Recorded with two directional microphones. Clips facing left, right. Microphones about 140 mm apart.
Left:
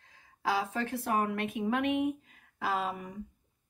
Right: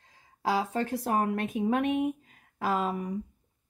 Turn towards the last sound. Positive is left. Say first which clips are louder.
# right 4 dB
turn(degrees=-40)  # may be behind; listen again after turning